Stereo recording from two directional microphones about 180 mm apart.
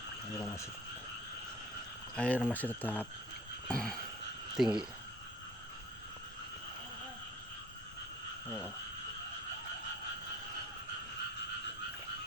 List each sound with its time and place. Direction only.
0.3 s speech: 15° left (ahead or behind)
2.1 s speech: 10° left (ahead or behind)
3.7 s a sound: 5° left (ahead or behind)
4.5 s speech: 5° right (ahead or behind)
8.4 s speech: 5° left (ahead or behind)